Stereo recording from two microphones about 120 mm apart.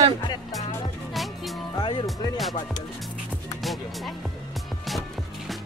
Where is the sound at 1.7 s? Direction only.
45° left (ahead or behind).